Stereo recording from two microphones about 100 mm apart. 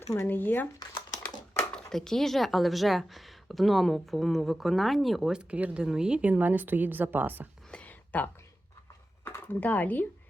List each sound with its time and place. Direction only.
0.1 s speech: 25° left (ahead or behind)
1.7 s speech: 5° left (ahead or behind); by 7.4 s 20° right (ahead or behind)
7.7 s a sound: 15° left (ahead or behind)
9.2 s speech: 20° left (ahead or behind)